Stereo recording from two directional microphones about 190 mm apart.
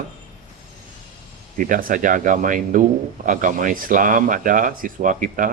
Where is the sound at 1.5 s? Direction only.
45° right (ahead or behind).